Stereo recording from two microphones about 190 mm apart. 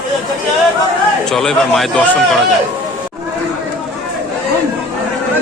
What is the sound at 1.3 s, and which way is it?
Speech, centre (ahead or behind).